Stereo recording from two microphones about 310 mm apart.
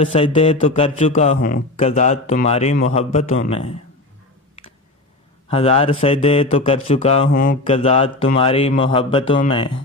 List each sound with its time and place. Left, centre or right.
0.0 s speech: centre
5.5 s speech: centre